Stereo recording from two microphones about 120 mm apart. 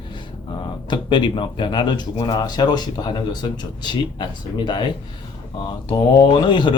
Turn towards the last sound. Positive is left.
turn(degrees=40)  # may be behind; listen again after turning